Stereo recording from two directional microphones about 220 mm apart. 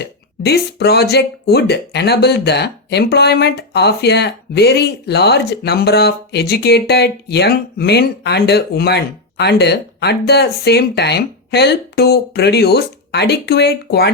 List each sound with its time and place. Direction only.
0.0 s speech: 50° left (ahead or behind)